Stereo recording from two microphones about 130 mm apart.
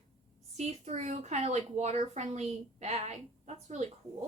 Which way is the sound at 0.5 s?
60° right (ahead or behind).